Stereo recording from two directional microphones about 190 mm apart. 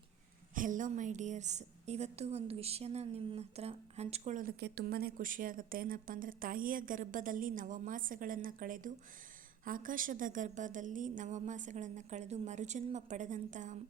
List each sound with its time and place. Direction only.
0.5 s a woman's voice: 45° right (ahead or behind)
4.6 s a woman's voice: 55° right (ahead or behind)